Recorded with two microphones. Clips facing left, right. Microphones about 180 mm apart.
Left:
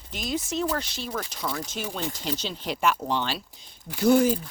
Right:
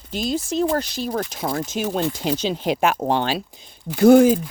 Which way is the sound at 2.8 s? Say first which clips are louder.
Right 4 dB; 50° right (ahead or behind).